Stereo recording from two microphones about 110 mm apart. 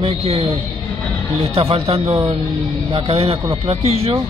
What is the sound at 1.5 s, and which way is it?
Speech, 65° right (ahead or behind).